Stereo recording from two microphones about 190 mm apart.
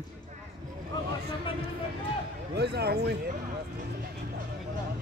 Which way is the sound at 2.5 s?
60° right (ahead or behind).